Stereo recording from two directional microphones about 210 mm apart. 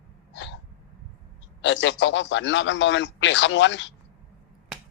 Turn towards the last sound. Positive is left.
turn(degrees=60)  # may be behind; listen again after turning